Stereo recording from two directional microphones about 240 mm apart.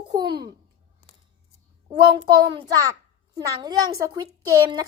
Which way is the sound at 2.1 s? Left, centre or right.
Centre.